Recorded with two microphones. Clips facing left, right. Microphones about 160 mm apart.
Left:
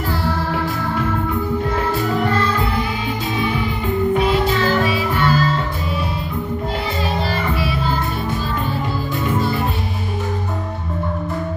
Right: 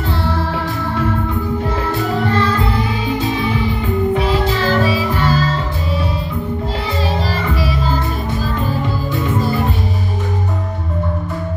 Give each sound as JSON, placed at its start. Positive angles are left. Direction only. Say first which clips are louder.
{"t": 4.6, "sound": "music", "louder": "right 2 dB", "side_deg": -35}
{"t": 7.3, "sound": "music", "louder": "right 1 dB", "side_deg": -35}